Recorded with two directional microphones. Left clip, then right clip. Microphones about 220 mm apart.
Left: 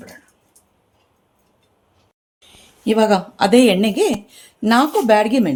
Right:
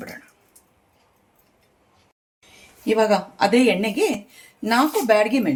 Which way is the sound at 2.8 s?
50° left (ahead or behind).